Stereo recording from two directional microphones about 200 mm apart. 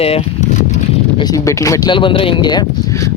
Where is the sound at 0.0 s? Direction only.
30° left (ahead or behind).